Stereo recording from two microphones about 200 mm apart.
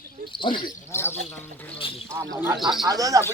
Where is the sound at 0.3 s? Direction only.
25° left (ahead or behind).